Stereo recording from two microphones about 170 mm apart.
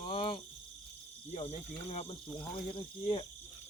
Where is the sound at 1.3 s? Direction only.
40° left (ahead or behind).